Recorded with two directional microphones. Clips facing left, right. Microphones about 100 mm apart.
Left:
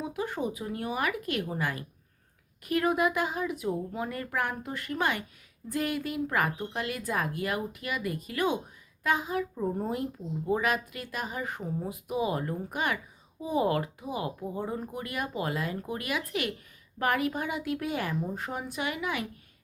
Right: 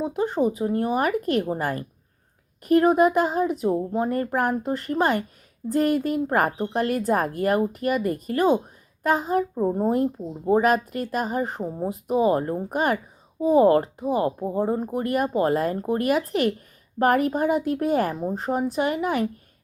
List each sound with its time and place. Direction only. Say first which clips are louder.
0.0 s speech: right 9 dB; 30° right (ahead or behind)